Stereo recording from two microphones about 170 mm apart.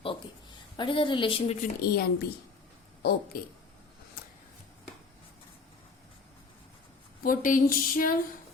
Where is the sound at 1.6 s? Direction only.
60° left (ahead or behind).